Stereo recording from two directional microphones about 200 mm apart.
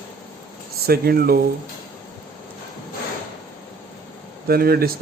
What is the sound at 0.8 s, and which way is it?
Speech, 50° right (ahead or behind).